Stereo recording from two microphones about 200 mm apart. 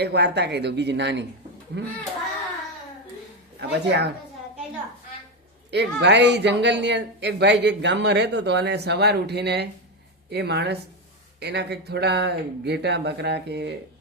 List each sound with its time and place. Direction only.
0.0 s speech: 55° right (ahead or behind)
3.6 s speech: 60° right (ahead or behind)
5.7 s speech: 60° right (ahead or behind)